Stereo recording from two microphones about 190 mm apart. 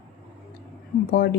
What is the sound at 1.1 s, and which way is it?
Speech, 60° left (ahead or behind).